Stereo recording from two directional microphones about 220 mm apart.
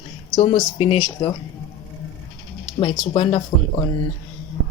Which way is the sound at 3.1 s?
25° left (ahead or behind).